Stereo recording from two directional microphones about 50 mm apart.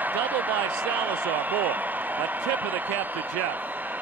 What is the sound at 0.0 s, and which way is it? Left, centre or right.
Speech, right.